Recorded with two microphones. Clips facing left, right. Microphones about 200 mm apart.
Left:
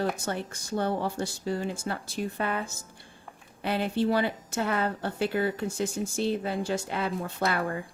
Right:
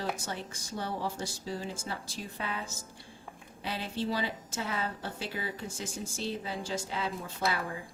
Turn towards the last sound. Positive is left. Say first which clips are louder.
# left 5 dB
turn(degrees=60)  # may be behind; listen again after turning